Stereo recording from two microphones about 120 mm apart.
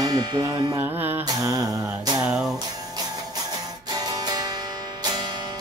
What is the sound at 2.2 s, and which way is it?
Music, 5° right (ahead or behind).